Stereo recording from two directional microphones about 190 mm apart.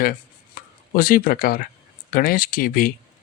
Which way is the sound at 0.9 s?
50° left (ahead or behind).